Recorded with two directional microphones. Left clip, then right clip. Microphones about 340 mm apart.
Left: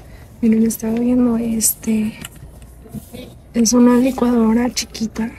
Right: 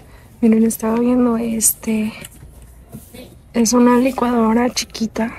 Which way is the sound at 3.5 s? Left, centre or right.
Centre.